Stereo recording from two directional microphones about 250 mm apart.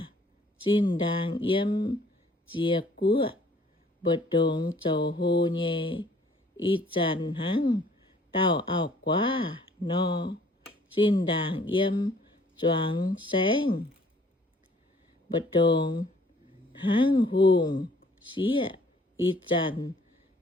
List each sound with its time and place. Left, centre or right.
0.6 s speech: centre
4.9 s mantra: centre
5.2 s speech: centre
15.5 s speech: centre